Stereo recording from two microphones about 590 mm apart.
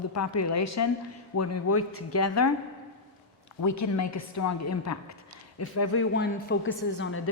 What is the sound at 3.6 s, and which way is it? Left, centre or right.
Speech, left.